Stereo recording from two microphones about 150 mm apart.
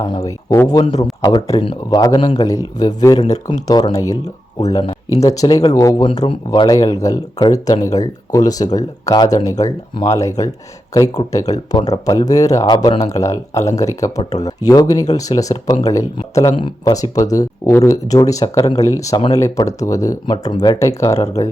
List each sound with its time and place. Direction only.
0.0 s speech: 25° left (ahead or behind)
2.1 s speech: 35° left (ahead or behind)
2.4 s speech: 25° left (ahead or behind)
3.2 s speech: 45° left (ahead or behind)
3.7 s speech: 25° left (ahead or behind)
5.2 s speech: 25° left (ahead or behind)
6.1 s speech: 35° left (ahead or behind)
12.7 s speech: 35° left (ahead or behind)
13.1 s speech: 20° left (ahead or behind)